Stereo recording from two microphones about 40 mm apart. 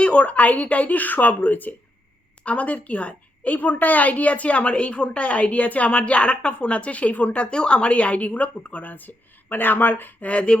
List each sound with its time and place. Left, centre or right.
0.0 s a woman's voice: left
2.4 s a woman's voice: left
7.5 s a woman's voice: left
10.2 s speech: left